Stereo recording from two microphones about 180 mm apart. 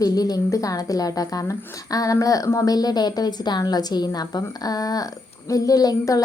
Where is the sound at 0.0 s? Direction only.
20° left (ahead or behind).